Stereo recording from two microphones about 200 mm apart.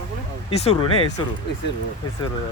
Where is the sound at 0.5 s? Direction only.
30° left (ahead or behind).